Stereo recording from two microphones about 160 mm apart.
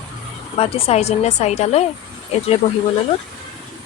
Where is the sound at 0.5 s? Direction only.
35° left (ahead or behind).